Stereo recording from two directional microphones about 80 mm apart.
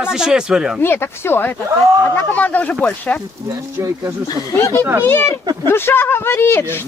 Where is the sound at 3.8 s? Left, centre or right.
Right.